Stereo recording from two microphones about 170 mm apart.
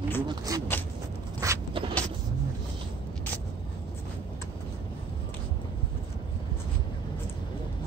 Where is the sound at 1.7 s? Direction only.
30° right (ahead or behind).